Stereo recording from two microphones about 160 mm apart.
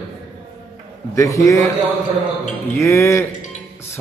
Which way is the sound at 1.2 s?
20° left (ahead or behind).